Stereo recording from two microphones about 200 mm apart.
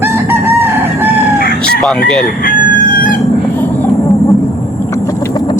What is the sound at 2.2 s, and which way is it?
Crowing, 40° left (ahead or behind).